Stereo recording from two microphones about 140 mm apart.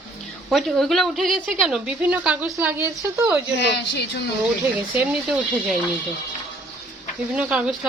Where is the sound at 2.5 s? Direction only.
20° right (ahead or behind).